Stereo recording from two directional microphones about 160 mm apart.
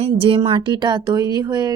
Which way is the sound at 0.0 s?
35° right (ahead or behind).